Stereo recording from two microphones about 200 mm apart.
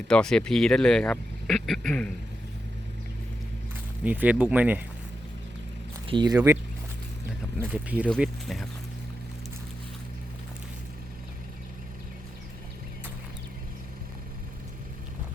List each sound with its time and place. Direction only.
0.1 s speech: 5° left (ahead or behind)
4.0 s speech: 10° right (ahead or behind)
6.1 s speech: 20° right (ahead or behind)
7.3 s a sound: 5° right (ahead or behind)
8.1 s speech: centre (ahead or behind)